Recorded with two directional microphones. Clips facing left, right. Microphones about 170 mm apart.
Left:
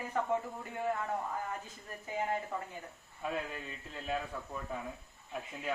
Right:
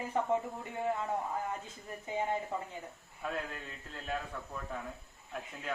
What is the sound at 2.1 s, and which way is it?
Speech, 20° right (ahead or behind).